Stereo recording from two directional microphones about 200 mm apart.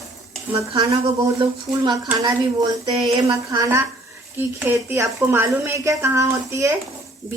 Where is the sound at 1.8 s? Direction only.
20° right (ahead or behind).